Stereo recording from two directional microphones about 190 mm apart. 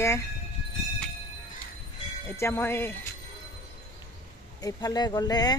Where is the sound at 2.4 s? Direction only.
15° left (ahead or behind).